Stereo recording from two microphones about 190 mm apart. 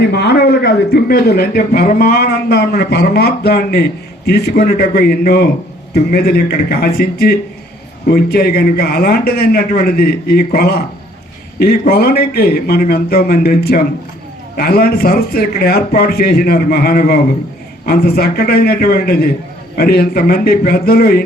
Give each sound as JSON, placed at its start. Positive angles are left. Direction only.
{"t": 0.0, "sound": "a man's voice", "side_deg": 60}